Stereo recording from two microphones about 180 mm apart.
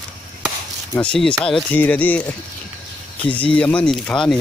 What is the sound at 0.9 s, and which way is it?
Speech, 5° left (ahead or behind).